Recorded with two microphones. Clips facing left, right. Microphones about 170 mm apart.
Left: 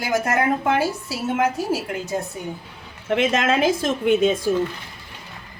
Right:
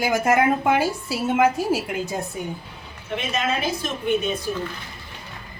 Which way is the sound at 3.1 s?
90° left.